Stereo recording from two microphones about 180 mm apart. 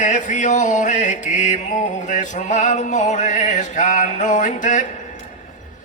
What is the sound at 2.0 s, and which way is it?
Music, 45° left (ahead or behind).